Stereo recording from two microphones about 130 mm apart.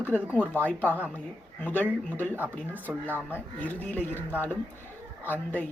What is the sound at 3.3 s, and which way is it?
Speech, 15° left (ahead or behind).